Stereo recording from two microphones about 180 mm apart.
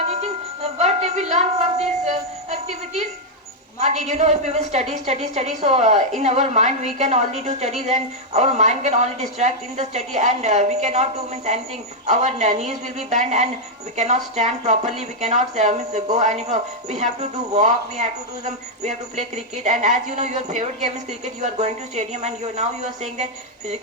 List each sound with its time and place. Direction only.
0.1 s music: 35° right (ahead or behind)
3.8 s a woman's voice: 40° right (ahead or behind)